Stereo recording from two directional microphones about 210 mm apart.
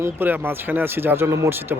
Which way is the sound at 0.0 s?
10° right (ahead or behind).